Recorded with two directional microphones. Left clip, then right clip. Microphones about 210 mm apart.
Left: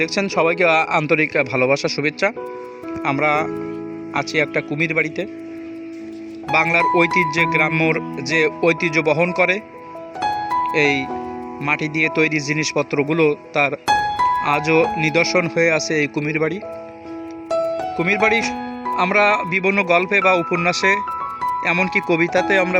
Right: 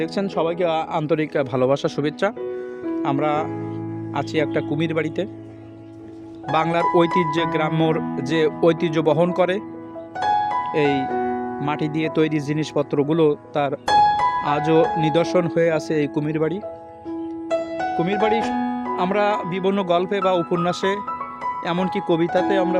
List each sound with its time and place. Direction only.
0.0 s speech: 5° right (ahead or behind); by 5.3 s 20° right (ahead or behind)
6.5 s speech: 15° right (ahead or behind)
10.7 s speech: 10° right (ahead or behind)
17.9 s speech: centre (ahead or behind)